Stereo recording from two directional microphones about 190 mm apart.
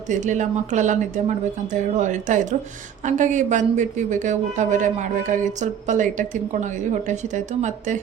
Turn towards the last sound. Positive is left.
turn(degrees=-40)  # may be behind; listen again after turning